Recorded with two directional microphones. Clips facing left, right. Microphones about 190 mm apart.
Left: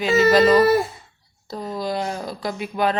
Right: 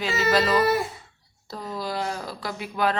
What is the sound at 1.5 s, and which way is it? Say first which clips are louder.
Speech: left 4 dB; 20° left (ahead or behind).